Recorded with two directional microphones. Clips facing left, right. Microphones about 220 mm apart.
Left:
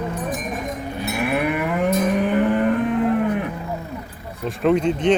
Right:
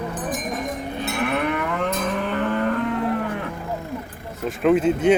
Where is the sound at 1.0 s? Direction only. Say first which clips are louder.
Left 2 dB; 10° left (ahead or behind).